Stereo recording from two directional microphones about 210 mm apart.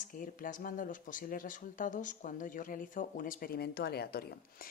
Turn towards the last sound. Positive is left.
turn(degrees=50)  # may be behind; listen again after turning